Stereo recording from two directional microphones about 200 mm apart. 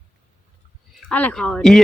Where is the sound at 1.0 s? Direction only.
5° left (ahead or behind).